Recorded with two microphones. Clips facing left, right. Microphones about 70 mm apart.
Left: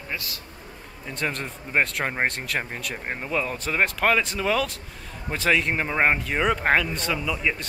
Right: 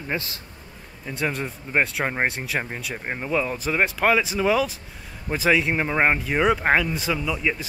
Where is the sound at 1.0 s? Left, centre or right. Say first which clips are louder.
Right 2 dB; centre.